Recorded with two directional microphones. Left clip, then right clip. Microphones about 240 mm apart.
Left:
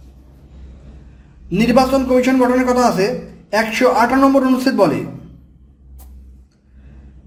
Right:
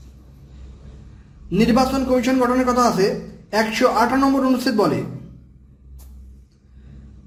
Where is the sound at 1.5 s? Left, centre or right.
Centre.